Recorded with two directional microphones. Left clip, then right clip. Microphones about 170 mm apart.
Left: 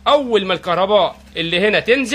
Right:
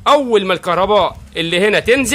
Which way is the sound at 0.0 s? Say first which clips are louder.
Right 3 dB; 35° right (ahead or behind).